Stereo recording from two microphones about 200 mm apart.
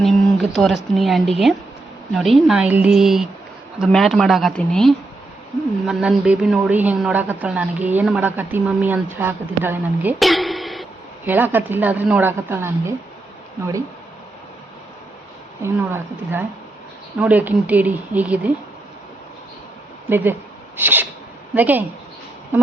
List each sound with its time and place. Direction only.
0.0 s a woman's voice: centre (ahead or behind)
15.6 s a woman's voice: 10° right (ahead or behind)
20.1 s a woman's voice: 10° right (ahead or behind)
20.7 s sneeze: 10° right (ahead or behind)
21.5 s a woman's voice: 10° right (ahead or behind)